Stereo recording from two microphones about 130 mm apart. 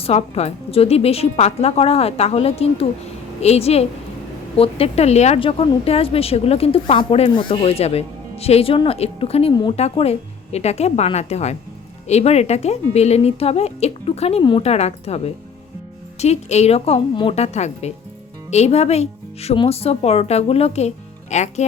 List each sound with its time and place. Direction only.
0.0 s speech: 55° left (ahead or behind)